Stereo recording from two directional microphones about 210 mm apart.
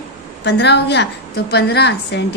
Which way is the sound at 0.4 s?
55° left (ahead or behind).